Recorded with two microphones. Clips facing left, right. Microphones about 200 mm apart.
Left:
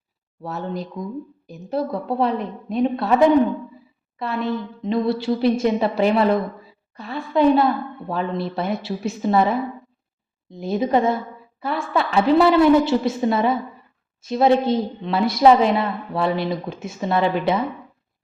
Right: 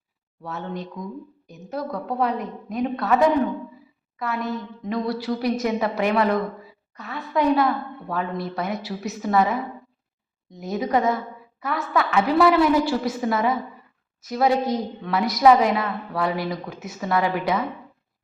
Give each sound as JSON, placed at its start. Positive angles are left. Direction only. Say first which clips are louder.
{"t": 0.4, "sound": "a woman's voice", "louder": "left 3 dB", "side_deg": 35}